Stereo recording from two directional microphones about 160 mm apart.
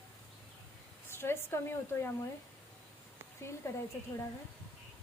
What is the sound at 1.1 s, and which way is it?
Speech, 15° left (ahead or behind).